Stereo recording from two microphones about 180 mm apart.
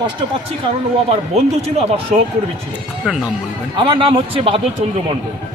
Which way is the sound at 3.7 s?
30° right (ahead or behind).